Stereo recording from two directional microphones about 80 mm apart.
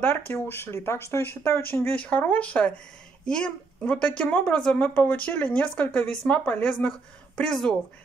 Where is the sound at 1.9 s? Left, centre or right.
Centre.